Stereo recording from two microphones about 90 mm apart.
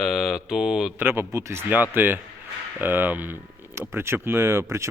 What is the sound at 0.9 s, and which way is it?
Speech, 25° right (ahead or behind).